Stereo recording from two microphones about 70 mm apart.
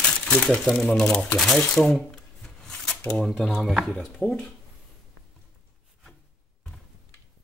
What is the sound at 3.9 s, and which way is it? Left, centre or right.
Speech, centre.